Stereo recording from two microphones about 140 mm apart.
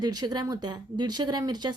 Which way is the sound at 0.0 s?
30° right (ahead or behind).